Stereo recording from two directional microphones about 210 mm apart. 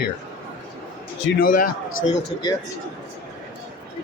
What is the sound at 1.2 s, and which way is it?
Speech, 55° left (ahead or behind).